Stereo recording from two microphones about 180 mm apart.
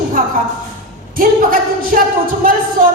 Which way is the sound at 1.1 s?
50° right (ahead or behind).